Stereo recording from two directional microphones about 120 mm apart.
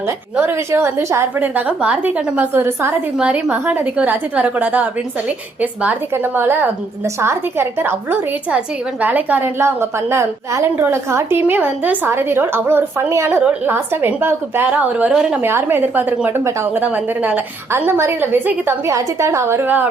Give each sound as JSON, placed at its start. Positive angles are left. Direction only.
{"t": 0.3, "sound": "a woman's voice", "side_deg": -20}
{"t": 3.2, "sound": "a woman's voice", "side_deg": -10}
{"t": 13.4, "sound": "a woman's voice", "side_deg": -10}
{"t": 15.4, "sound": "a woman's voice", "side_deg": -20}